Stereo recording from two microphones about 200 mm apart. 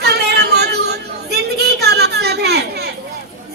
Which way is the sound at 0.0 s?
55° right (ahead or behind).